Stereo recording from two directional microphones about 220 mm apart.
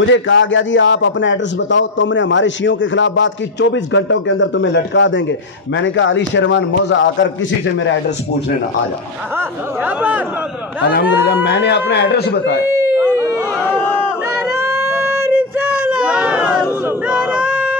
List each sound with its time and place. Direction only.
0.0 s a man's voice: 60° left (ahead or behind)
9.8 s a man's voice: 10° right (ahead or behind)
11.4 s speech: 50° left (ahead or behind)
14.6 s a sound: 10° right (ahead or behind)